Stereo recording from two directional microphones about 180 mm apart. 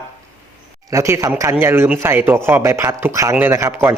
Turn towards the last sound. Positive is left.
turn(degrees=-15)  # may be behind; listen again after turning